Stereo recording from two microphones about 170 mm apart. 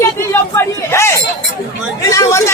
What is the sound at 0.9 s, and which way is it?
Chatter, 15° left (ahead or behind).